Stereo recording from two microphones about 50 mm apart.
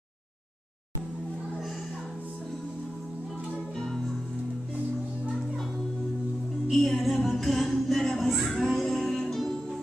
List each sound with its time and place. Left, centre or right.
6.7 s music: centre
8.3 s speech: centre
9.2 s music: centre